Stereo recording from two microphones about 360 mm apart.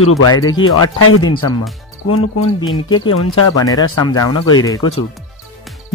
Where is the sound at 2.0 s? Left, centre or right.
Left.